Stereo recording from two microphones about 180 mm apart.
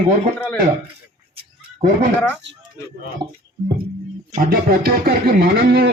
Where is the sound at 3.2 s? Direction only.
25° right (ahead or behind).